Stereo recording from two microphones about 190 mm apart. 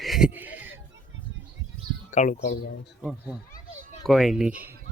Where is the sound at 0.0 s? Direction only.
Centre (ahead or behind).